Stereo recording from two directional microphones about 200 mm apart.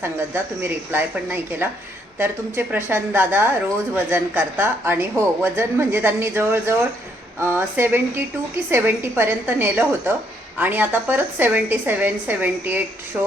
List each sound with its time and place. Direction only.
0.0 s a woman's voice: 10° right (ahead or behind)